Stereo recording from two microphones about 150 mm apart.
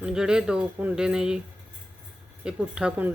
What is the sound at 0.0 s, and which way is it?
Speech, 5° right (ahead or behind).